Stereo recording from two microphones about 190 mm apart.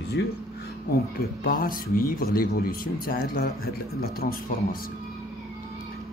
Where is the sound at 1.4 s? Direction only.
50° left (ahead or behind).